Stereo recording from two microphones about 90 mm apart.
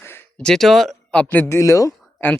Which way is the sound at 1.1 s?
20° left (ahead or behind).